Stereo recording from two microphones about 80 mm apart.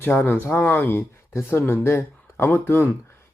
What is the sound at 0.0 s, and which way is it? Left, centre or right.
Speech, left.